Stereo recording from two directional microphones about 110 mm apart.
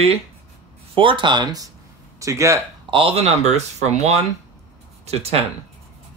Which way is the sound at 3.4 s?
90° right.